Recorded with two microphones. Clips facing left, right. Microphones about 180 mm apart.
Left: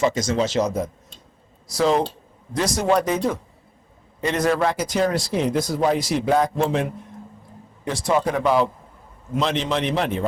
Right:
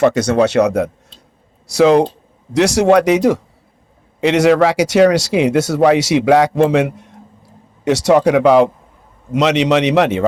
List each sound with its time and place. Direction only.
0.0 s speech: 65° right (ahead or behind)